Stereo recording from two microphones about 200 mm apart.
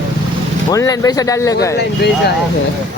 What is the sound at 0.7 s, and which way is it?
Speech, 15° left (ahead or behind).